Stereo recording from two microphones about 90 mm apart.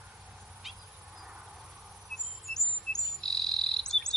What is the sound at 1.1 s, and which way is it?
Cricket, 5° right (ahead or behind).